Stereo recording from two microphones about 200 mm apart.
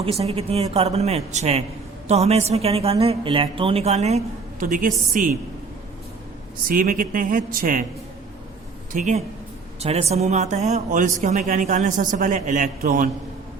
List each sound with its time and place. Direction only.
0.0 s a man's voice: 30° right (ahead or behind)
6.7 s speech: 45° right (ahead or behind)
8.9 s a man's voice: 35° right (ahead or behind)